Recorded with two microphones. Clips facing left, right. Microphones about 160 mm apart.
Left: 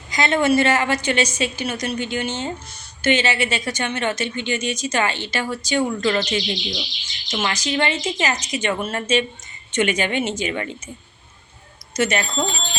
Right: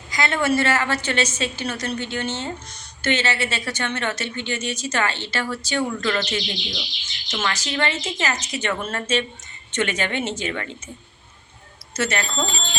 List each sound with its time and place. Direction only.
0.1 s a woman's voice: 20° left (ahead or behind)
11.9 s a woman's voice: 15° left (ahead or behind)